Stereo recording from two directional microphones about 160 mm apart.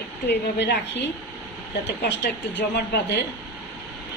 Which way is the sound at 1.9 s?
90° left.